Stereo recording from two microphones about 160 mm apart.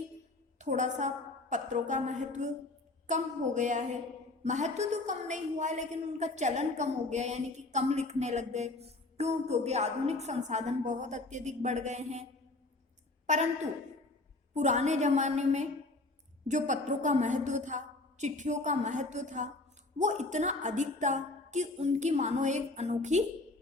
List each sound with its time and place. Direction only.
0.6 s a woman's voice: 50° right (ahead or behind)
13.2 s a woman's voice: 50° right (ahead or behind)
14.5 s a woman's voice: 45° right (ahead or behind)